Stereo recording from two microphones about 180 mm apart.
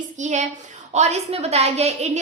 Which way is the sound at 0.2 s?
40° right (ahead or behind).